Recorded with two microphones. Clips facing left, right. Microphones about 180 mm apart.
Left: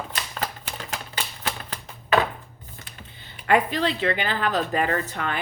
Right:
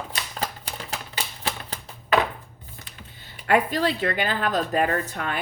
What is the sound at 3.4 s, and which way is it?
Speech, 45° right (ahead or behind).